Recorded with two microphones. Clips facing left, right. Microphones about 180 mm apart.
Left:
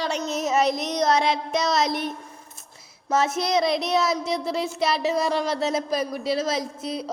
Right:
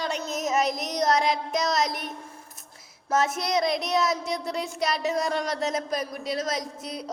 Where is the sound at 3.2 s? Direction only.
25° left (ahead or behind).